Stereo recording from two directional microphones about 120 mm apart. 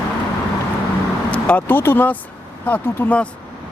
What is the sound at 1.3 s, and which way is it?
Speech, 10° left (ahead or behind).